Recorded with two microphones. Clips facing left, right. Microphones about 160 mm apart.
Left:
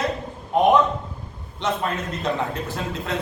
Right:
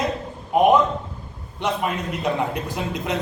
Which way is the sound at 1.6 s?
10° right (ahead or behind).